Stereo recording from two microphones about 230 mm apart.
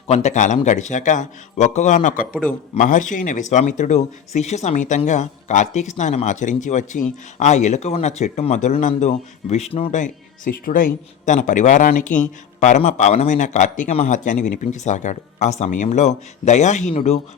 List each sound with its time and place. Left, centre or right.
0.1 s speech: left